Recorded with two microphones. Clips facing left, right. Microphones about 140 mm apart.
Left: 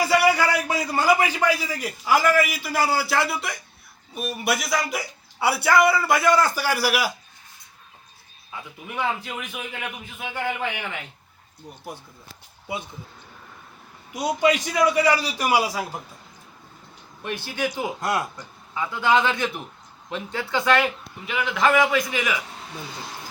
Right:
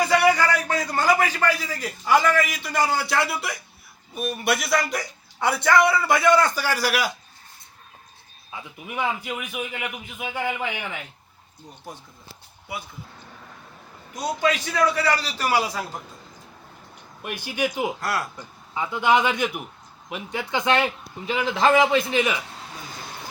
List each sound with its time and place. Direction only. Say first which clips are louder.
0.0 s a man's voice: even; 5° left (ahead or behind)
9.0 s a man's voice: even; 10° right (ahead or behind)
14.1 s a man's voice: left 3 dB; 10° left (ahead or behind)
17.2 s a man's voice: right 1 dB; 15° right (ahead or behind)
18.0 s speech: left 2 dB; 20° left (ahead or behind)
18.7 s a man's voice: right 1 dB; 20° right (ahead or behind)